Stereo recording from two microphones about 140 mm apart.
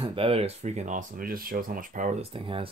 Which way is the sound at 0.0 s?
40° right (ahead or behind).